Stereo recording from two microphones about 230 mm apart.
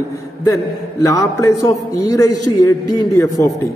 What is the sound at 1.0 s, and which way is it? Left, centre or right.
A man's voice, centre.